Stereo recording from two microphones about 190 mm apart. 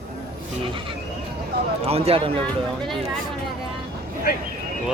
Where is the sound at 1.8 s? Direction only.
30° right (ahead or behind).